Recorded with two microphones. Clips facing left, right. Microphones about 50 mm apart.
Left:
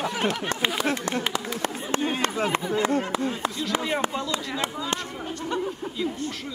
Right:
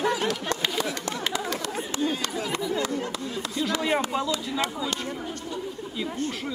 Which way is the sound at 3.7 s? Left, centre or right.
Left.